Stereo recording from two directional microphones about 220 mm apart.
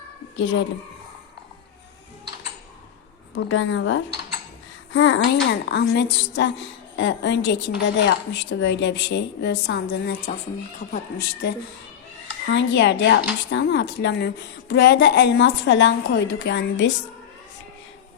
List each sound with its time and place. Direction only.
0.3 s a woman's voice: 55° left (ahead or behind)
3.3 s speech: 60° left (ahead or behind); by 10.3 s 45° left (ahead or behind)
12.5 s speech: 55° left (ahead or behind)